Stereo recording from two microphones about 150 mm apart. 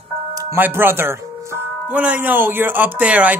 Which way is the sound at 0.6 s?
15° right (ahead or behind).